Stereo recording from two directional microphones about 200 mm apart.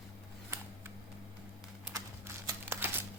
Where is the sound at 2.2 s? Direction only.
10° right (ahead or behind).